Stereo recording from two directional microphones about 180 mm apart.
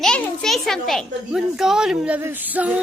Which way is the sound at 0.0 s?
Centre (ahead or behind).